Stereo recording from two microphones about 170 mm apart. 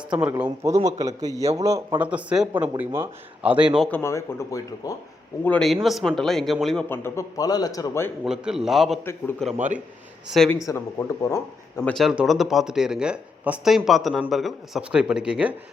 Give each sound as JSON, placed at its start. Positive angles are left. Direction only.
{"t": 0.6, "sound": "a man's voice", "side_deg": -20}
{"t": 2.0, "sound": "a man's voice", "side_deg": -5}
{"t": 3.8, "sound": "speech", "side_deg": 15}
{"t": 5.5, "sound": "speech", "side_deg": 0}
{"t": 6.8, "sound": "a man's voice", "side_deg": 15}
{"t": 8.2, "sound": "speech", "side_deg": -5}
{"t": 10.7, "sound": "a man's voice", "side_deg": 20}
{"t": 11.8, "sound": "speech", "side_deg": 0}